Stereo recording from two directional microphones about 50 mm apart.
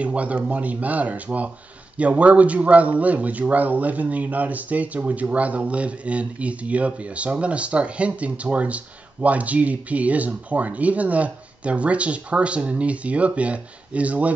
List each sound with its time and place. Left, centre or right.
0.0 s speech: right